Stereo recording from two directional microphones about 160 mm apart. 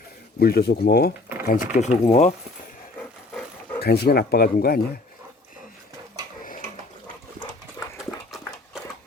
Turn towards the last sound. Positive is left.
turn(degrees=20)  # may be behind; listen again after turning